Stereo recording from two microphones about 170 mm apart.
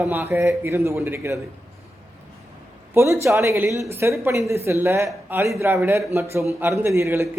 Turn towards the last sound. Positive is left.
turn(degrees=-15)  # may be behind; listen again after turning